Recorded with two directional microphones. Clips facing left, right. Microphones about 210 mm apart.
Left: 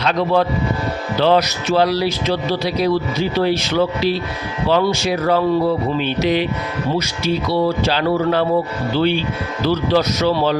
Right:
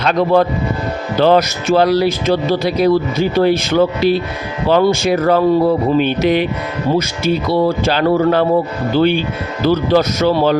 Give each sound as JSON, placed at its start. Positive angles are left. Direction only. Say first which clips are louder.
{"t": 0.0, "sound": "speech", "louder": "right 4 dB", "side_deg": -50}